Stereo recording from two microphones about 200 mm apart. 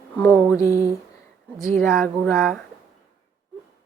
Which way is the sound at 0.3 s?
5° right (ahead or behind).